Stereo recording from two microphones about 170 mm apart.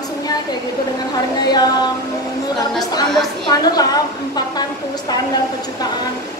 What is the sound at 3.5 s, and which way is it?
A woman's voice, 25° left (ahead or behind).